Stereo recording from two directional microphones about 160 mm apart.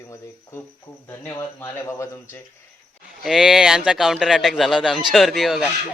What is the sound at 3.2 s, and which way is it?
Speech, centre (ahead or behind).